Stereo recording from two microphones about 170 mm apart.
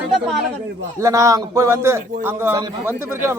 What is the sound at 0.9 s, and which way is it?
Speech, 15° right (ahead or behind).